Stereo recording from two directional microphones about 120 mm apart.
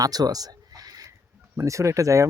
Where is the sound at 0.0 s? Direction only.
30° right (ahead or behind).